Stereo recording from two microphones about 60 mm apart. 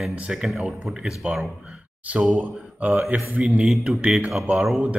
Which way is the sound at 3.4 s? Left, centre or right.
Centre.